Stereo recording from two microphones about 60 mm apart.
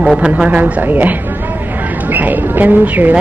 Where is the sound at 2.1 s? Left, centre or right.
Right.